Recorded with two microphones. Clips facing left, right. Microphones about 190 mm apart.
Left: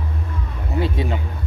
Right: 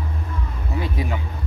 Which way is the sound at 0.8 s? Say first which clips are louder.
Left 4 dB; 25° left (ahead or behind).